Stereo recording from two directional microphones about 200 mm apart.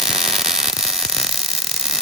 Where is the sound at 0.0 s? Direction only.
Centre (ahead or behind).